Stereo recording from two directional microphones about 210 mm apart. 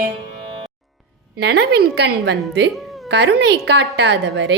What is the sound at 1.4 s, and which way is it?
A woman's voice, 50° right (ahead or behind).